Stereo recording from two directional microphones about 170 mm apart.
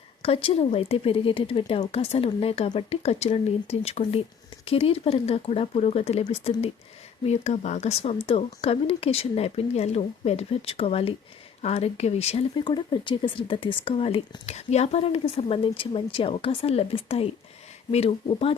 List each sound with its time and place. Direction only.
0.2 s speech: 35° left (ahead or behind)